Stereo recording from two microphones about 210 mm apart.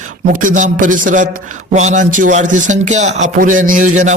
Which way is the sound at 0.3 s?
40° right (ahead or behind).